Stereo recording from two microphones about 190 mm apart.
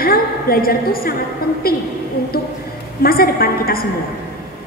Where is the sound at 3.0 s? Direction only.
50° left (ahead or behind).